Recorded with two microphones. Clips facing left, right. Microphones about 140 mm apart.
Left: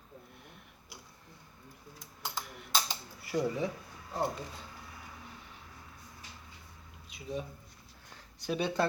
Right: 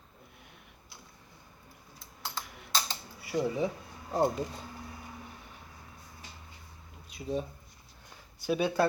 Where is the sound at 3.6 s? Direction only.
35° right (ahead or behind).